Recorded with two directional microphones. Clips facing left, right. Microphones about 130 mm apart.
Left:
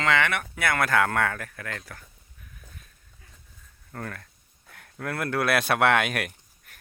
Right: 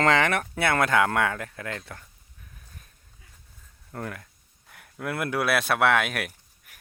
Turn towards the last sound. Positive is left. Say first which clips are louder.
# left 1 dB
turn(degrees=-5)  # may be behind; listen again after turning